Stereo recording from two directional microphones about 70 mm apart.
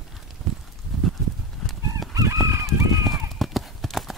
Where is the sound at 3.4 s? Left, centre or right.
Centre.